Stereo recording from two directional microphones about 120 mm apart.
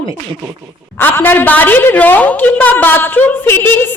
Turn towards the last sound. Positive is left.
turn(degrees=20)  # may be behind; listen again after turning